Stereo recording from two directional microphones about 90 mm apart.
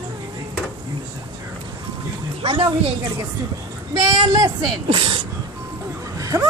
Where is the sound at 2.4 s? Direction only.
90° right.